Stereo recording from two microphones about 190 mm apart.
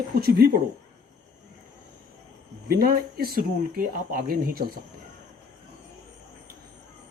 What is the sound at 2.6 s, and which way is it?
Speech, 50° right (ahead or behind).